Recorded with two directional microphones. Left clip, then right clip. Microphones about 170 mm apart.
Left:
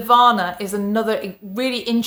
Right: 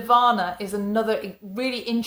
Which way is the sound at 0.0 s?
20° left (ahead or behind).